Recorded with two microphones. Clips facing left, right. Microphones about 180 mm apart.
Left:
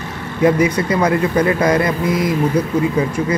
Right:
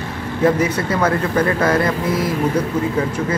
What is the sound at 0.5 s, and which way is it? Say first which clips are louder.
Speech: left 3 dB; 10° left (ahead or behind).